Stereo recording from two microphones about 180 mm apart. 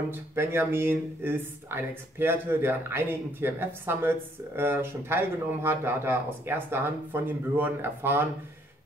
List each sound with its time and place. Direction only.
0.1 s speech: 15° right (ahead or behind)